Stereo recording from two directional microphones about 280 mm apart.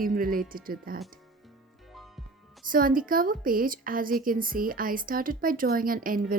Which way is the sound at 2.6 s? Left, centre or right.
Right.